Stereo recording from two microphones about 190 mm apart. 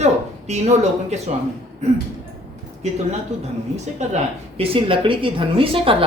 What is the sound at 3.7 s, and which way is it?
A woman's voice, 35° right (ahead or behind).